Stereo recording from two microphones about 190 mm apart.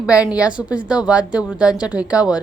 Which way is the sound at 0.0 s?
5° right (ahead or behind).